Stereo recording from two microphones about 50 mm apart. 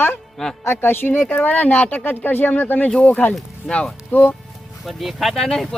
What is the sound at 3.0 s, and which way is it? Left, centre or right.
Speech, left.